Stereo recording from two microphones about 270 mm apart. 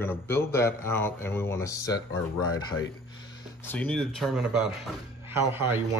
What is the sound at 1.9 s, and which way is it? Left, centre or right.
Speech, left.